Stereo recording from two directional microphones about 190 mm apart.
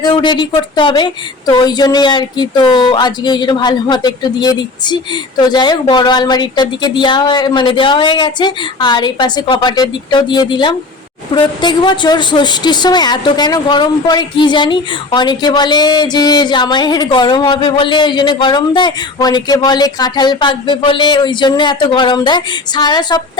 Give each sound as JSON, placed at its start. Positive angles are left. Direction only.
{"t": 0.0, "sound": "a woman's voice", "side_deg": 25}